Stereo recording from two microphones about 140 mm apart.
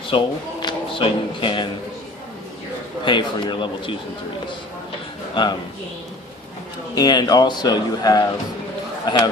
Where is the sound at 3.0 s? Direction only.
35° left (ahead or behind).